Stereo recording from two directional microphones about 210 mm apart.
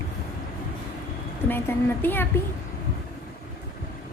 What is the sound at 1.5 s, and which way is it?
Speech, 10° left (ahead or behind).